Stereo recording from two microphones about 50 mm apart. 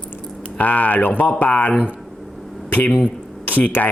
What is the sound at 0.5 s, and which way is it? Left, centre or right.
Speech, left.